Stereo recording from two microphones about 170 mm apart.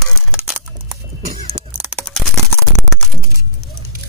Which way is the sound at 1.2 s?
50° right (ahead or behind).